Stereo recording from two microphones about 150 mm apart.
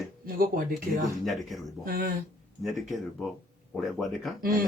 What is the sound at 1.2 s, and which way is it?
Speech, centre (ahead or behind).